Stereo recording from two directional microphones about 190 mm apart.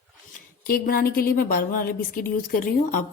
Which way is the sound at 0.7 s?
50° left (ahead or behind).